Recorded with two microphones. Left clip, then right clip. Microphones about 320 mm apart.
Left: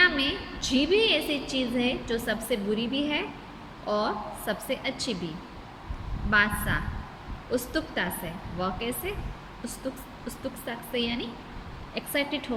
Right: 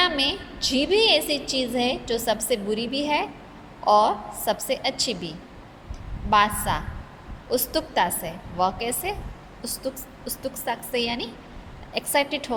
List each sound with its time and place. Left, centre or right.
0.0 s a woman's voice: centre
6.3 s a woman's voice: centre
10.2 s a woman's voice: centre